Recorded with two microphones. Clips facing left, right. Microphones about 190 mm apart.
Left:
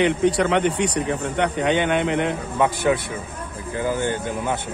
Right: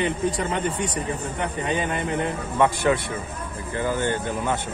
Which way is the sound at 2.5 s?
10° left (ahead or behind).